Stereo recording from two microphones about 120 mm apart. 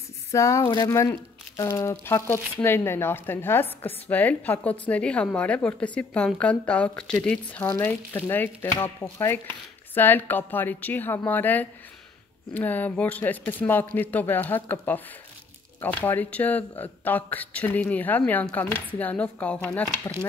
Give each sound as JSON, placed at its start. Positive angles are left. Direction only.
{"t": 0.3, "sound": "speech", "side_deg": 25}